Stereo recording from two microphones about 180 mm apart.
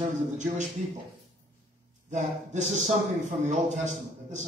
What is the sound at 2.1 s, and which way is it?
Speech, 40° right (ahead or behind).